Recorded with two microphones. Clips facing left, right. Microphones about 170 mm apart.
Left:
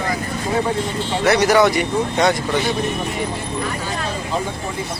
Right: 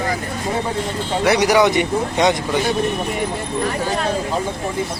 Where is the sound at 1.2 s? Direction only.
15° right (ahead or behind).